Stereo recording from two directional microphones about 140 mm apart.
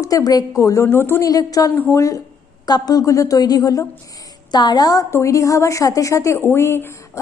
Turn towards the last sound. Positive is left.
turn(degrees=15)  # may be behind; listen again after turning